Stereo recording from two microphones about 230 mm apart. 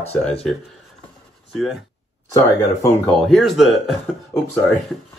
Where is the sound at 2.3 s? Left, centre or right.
Centre.